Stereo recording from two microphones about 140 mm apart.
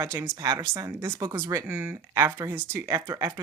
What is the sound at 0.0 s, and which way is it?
A woman's voice, 20° right (ahead or behind).